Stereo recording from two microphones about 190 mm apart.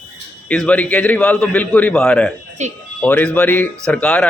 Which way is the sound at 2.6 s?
35° right (ahead or behind).